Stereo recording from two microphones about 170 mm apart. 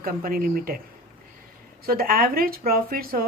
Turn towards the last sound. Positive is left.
turn(degrees=-60)  # may be behind; listen again after turning